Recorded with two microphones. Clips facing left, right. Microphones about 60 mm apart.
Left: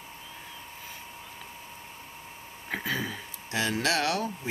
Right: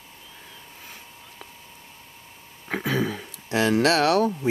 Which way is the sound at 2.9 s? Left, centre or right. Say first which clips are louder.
Right 8 dB; right.